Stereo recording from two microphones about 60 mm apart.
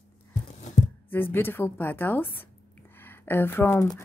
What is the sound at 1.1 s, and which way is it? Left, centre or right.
A woman's voice, left.